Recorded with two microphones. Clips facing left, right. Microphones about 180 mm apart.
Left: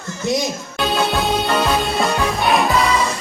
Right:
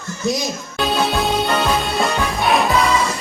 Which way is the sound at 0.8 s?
Centre (ahead or behind).